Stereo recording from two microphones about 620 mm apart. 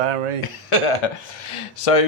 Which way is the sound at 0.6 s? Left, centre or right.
Left.